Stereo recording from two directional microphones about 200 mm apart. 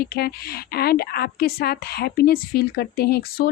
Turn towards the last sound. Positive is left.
turn(degrees=50)  # may be behind; listen again after turning